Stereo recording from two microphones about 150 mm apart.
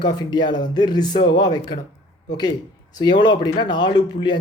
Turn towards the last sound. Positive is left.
turn(degrees=30)  # may be behind; listen again after turning